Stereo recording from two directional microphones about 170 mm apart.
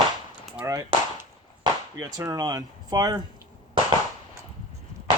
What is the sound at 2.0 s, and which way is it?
Speech, 20° right (ahead or behind).